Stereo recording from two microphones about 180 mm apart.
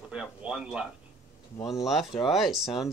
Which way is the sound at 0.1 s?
5° right (ahead or behind).